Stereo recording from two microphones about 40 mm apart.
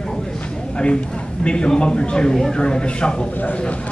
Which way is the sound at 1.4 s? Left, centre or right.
Left.